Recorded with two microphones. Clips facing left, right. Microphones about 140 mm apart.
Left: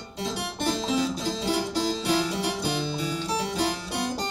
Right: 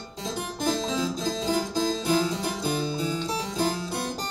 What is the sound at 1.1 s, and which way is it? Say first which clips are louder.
Music: right 1 dB; 70° left (ahead or behind).